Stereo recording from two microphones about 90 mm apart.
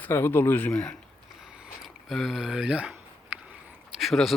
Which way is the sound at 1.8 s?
Centre (ahead or behind).